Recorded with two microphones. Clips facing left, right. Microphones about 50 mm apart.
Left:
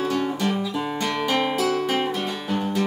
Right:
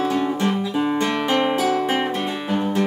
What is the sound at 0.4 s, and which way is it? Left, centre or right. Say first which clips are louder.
Music: right 3 dB; right.